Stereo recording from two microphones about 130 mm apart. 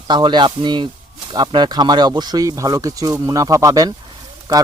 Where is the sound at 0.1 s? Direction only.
35° right (ahead or behind).